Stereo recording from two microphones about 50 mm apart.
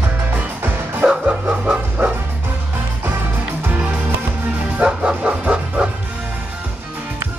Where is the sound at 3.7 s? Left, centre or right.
Right.